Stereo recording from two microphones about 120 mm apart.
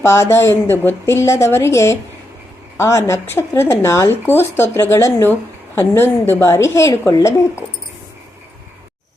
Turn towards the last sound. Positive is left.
turn(degrees=25)  # may be behind; listen again after turning